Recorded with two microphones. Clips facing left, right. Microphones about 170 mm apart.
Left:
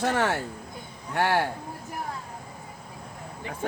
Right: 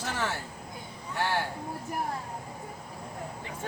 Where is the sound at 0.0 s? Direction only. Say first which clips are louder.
Left 8 dB; 65° left (ahead or behind).